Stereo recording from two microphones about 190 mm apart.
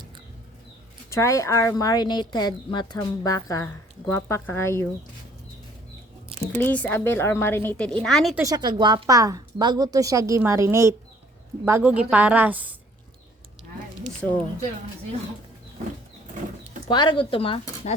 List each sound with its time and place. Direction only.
1.1 s a woman's voice: 15° left (ahead or behind)
6.2 s a sound: 30° right (ahead or behind)
6.5 s a woman's voice: 10° left (ahead or behind)
8.4 s a woman's voice: 20° right (ahead or behind)
16.9 s a woman's voice: 25° left (ahead or behind)